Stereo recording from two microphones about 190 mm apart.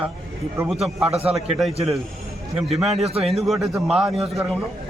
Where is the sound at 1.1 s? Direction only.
30° right (ahead or behind).